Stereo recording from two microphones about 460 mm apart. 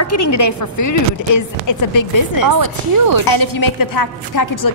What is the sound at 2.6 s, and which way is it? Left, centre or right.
Speech, right.